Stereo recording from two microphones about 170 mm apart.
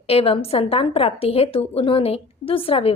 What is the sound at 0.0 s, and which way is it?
A woman's voice, 35° left (ahead or behind).